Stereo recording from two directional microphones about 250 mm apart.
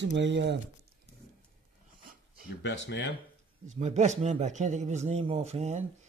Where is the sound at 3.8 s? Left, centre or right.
Right.